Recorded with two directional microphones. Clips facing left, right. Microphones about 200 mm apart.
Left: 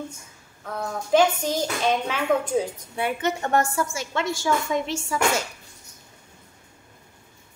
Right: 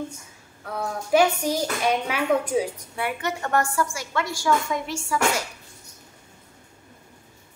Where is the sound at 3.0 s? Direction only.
25° left (ahead or behind).